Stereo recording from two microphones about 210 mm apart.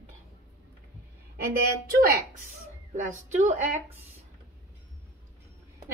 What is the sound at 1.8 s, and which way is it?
A woman's voice, 45° right (ahead or behind).